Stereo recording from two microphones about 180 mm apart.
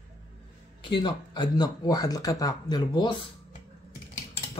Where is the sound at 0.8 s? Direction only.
25° left (ahead or behind).